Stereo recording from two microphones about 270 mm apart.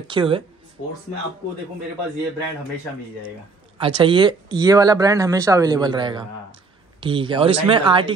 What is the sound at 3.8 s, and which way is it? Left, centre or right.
Speech, centre.